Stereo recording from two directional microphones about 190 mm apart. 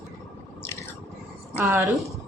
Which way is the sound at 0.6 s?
15° left (ahead or behind).